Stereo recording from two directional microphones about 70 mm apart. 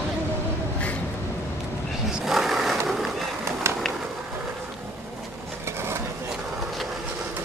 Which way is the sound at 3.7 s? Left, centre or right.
Right.